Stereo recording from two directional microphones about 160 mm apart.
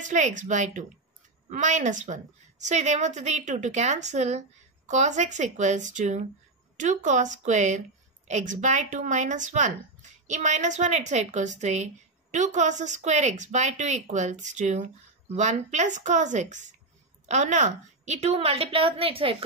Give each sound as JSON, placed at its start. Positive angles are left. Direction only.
{"t": 0.0, "sound": "a woman's voice", "side_deg": -50}